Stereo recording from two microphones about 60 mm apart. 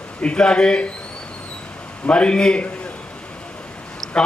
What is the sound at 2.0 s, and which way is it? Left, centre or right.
Speech, centre.